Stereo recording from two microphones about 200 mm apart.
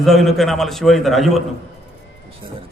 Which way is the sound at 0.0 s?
Centre (ahead or behind).